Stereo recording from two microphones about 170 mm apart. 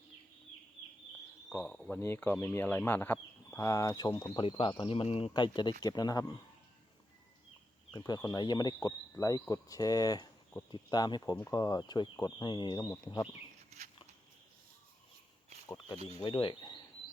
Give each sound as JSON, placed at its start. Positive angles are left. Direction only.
{"t": 1.5, "sound": "speech", "side_deg": 5}
{"t": 7.9, "sound": "speech", "side_deg": 25}
{"t": 13.7, "sound": "a sound", "side_deg": -40}
{"t": 16.1, "sound": "speech", "side_deg": 25}